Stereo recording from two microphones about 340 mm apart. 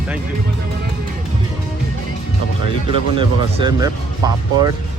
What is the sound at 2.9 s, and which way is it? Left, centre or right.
Speech, centre.